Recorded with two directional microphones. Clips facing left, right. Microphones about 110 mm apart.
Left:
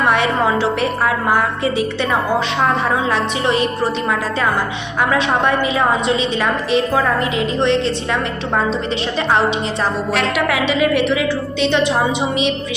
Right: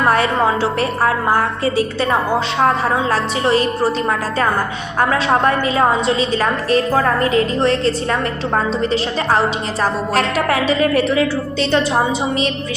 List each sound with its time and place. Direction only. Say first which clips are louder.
0.1 s a woman's voice: right 1 dB; 40° right (ahead or behind)
3.1 s a woman's voice: right 1 dB; 35° right (ahead or behind)
4.9 s a woman's voice: right 1 dB; 40° right (ahead or behind)